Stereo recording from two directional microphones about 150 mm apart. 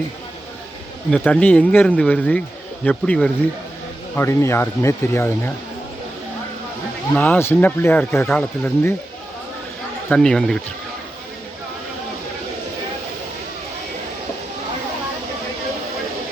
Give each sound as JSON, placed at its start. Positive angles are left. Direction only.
{"t": 1.1, "sound": "speech", "side_deg": 5}
{"t": 7.2, "sound": "speech", "side_deg": 15}
{"t": 10.1, "sound": "speech", "side_deg": 5}